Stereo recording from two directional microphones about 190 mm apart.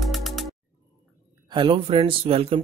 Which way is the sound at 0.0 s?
Centre (ahead or behind).